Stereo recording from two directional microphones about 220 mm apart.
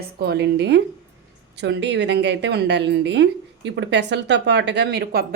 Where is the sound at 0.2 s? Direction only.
45° right (ahead or behind).